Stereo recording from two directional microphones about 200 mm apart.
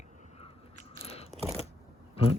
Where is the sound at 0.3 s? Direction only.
30° left (ahead or behind).